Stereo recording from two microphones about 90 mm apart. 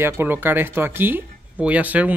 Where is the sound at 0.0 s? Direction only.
25° right (ahead or behind).